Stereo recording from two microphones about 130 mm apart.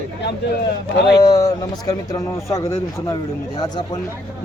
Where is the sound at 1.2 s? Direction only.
30° left (ahead or behind).